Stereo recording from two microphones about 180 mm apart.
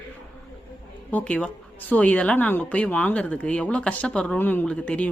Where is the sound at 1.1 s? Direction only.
5° left (ahead or behind).